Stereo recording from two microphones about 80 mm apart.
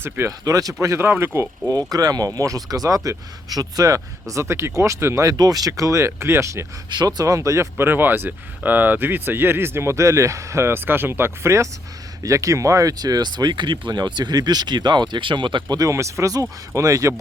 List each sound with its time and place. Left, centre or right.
0.0 s speech: right
0.4 s speech: right
0.9 s speech: right
1.9 s speech: right
5.2 s speech: right
6.9 s speech: right
7.3 s speech: right
7.8 s speech: right
15.7 s speech: right